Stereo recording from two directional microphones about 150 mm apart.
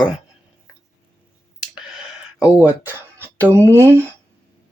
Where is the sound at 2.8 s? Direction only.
15° right (ahead or behind).